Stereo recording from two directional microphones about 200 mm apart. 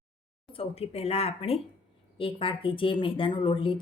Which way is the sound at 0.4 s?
30° left (ahead or behind).